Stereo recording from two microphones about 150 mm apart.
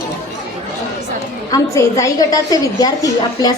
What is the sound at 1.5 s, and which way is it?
A woman's voice, 20° left (ahead or behind).